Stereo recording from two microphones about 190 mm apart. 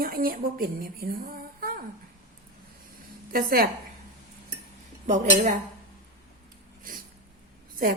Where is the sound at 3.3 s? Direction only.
50° right (ahead or behind).